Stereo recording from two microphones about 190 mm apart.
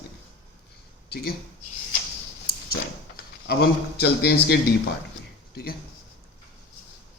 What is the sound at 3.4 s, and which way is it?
A man's voice, 60° left (ahead or behind).